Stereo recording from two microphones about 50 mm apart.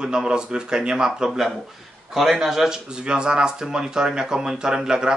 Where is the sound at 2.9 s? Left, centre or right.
Centre.